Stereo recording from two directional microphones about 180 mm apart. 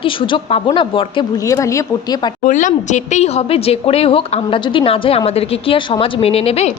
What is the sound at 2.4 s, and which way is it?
A woman's voice, 45° left (ahead or behind).